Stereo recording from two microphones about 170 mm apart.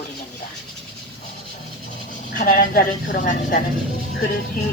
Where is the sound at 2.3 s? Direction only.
60° left (ahead or behind).